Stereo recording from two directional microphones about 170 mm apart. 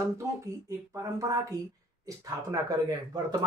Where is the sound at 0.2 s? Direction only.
15° right (ahead or behind).